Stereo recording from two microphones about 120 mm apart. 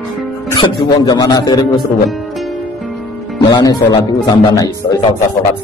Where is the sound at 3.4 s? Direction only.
35° left (ahead or behind).